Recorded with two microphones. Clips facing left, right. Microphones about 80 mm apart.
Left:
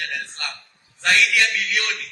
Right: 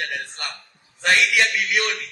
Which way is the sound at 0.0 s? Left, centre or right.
Right.